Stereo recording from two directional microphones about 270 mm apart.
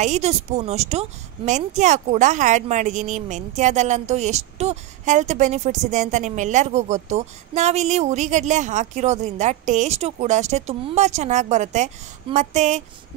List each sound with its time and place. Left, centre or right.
0.0 s a woman's voice: right